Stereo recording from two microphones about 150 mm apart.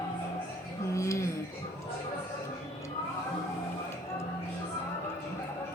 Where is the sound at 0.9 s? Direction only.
20° left (ahead or behind).